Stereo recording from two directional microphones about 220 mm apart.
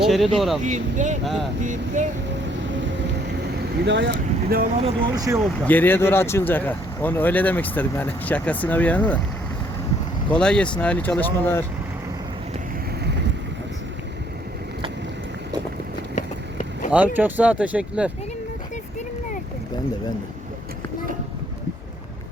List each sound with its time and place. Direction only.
0.3 s speech: centre (ahead or behind)
0.6 s speech: 35° right (ahead or behind)
1.2 s speech: centre (ahead or behind)
1.6 s speech: 35° right (ahead or behind)
2.5 s vehicle: 55° right (ahead or behind)
3.8 s speech: 50° right (ahead or behind)
4.8 s speech: 25° right (ahead or behind)
5.4 s speech: 5° left (ahead or behind)
10.2 s speech: 5° left (ahead or behind)
16.1 s vehicle: 35° left (ahead or behind)
17.2 s speech: 10° right (ahead or behind)